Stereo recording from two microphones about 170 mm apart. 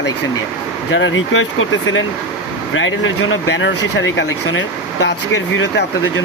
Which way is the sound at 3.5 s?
90° left.